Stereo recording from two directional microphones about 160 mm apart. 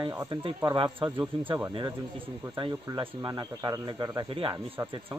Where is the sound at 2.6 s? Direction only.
25° right (ahead or behind).